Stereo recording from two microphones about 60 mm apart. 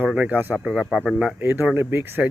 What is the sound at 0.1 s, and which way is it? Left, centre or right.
Speech, centre.